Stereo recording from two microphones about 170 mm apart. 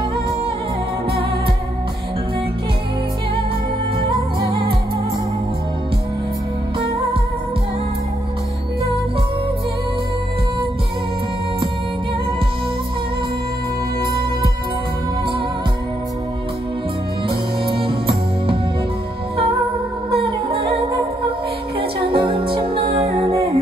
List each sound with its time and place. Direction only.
17.3 s music: 30° right (ahead or behind)
20.2 s music: 35° right (ahead or behind)
21.7 s music: 30° right (ahead or behind)